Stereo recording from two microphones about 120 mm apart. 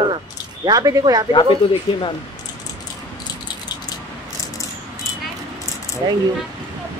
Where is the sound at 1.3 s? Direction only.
45° left (ahead or behind).